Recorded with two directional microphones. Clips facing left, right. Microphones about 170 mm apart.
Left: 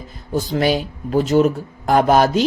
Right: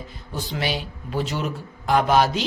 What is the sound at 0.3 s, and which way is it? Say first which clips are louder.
Speech: left 9 dB; 45° left (ahead or behind).